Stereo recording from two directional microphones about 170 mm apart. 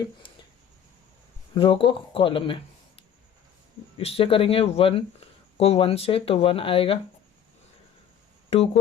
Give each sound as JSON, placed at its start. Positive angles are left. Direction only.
{"t": 0.2, "sound": "a sound", "side_deg": 30}
{"t": 1.5, "sound": "speech", "side_deg": 30}
{"t": 3.9, "sound": "speech", "side_deg": 35}
{"t": 8.4, "sound": "speech", "side_deg": 35}